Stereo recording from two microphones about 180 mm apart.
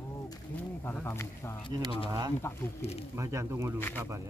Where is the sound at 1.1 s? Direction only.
15° left (ahead or behind).